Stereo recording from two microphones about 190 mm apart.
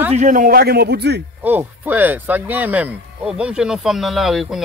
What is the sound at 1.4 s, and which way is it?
Speech, 10° right (ahead or behind).